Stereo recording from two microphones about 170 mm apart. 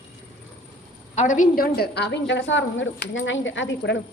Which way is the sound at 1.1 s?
45° left (ahead or behind).